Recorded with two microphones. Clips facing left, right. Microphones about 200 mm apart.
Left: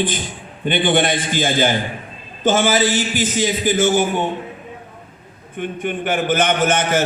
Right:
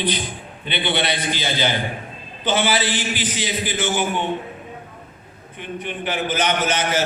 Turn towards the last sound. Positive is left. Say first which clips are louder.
# left 4 dB
turn(degrees=50)  # may be behind; listen again after turning